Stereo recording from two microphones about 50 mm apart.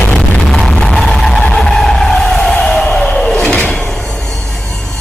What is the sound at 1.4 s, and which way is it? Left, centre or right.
Skidding, centre.